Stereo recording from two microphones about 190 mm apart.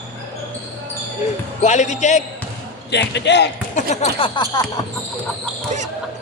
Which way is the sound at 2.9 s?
65° left (ahead or behind).